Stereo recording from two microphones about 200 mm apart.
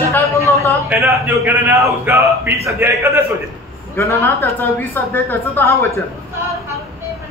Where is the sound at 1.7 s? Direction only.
15° right (ahead or behind).